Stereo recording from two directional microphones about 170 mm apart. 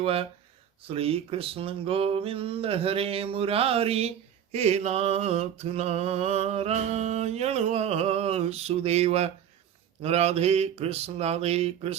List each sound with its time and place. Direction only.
0.0 s mantra: 35° right (ahead or behind)